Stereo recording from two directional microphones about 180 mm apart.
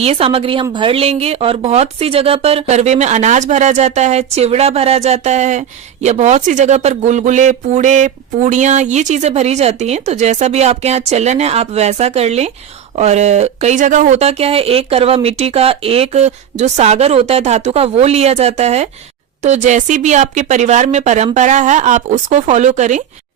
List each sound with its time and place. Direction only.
0.0 s speech: 35° right (ahead or behind)